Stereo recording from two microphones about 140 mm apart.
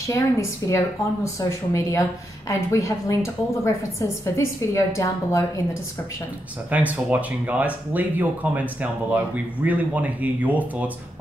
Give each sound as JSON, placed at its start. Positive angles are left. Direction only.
{"t": 0.1, "sound": "speech", "side_deg": 20}
{"t": 6.7, "sound": "speech", "side_deg": -10}